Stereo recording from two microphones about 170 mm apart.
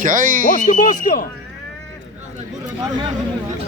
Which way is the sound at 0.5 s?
50° left (ahead or behind).